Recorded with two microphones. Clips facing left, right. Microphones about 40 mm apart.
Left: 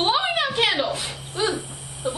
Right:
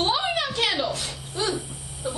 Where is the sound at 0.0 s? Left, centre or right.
Left.